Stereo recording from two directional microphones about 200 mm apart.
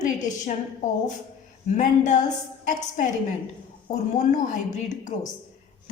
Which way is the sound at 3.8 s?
35° left (ahead or behind).